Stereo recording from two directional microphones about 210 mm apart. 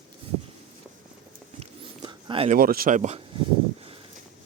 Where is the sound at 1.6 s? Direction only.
20° right (ahead or behind).